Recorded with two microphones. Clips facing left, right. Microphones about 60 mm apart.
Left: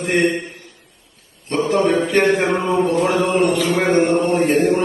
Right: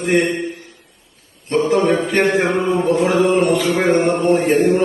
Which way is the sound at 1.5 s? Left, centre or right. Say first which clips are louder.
Right 2 dB; centre.